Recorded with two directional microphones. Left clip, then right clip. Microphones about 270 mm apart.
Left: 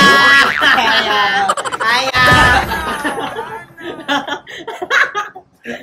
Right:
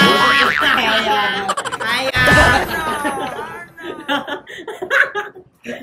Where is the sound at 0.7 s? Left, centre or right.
Centre.